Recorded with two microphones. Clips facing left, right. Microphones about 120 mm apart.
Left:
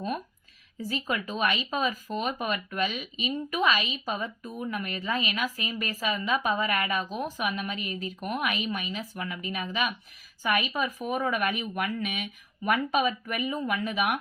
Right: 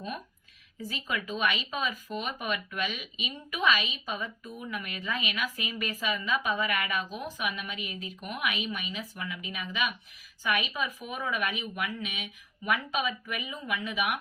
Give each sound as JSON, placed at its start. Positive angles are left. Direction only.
{"t": 0.8, "sound": "speech", "side_deg": 40}